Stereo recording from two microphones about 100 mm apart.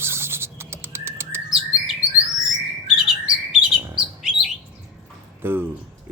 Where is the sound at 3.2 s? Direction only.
10° right (ahead or behind).